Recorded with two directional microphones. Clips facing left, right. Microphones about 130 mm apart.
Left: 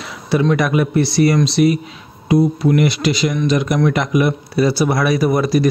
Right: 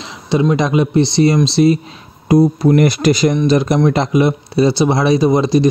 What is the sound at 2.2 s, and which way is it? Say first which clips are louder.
Speech: right 3 dB; 40° right (ahead or behind).